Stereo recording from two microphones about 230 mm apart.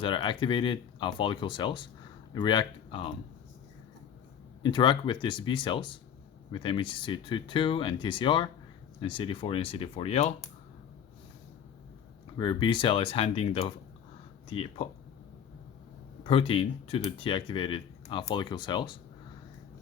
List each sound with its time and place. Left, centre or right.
0.0 s speech: left
4.6 s speech: centre
12.4 s speech: centre
16.2 s speech: left